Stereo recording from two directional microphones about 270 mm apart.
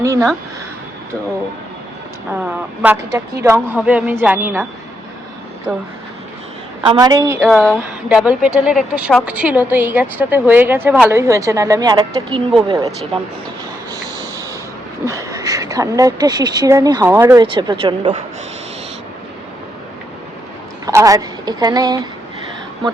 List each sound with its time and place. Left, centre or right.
0.0 s speech: centre
2.8 s a woman's voice: centre
5.7 s speech: centre
6.8 s a woman's voice: centre
15.0 s a woman's voice: centre
20.8 s a woman's voice: centre